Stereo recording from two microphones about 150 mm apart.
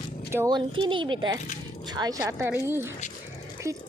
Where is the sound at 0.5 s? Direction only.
30° right (ahead or behind).